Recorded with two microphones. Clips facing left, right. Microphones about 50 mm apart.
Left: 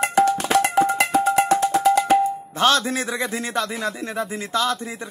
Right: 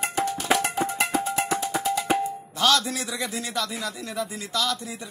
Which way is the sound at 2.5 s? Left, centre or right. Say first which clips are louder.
Left 3 dB; left.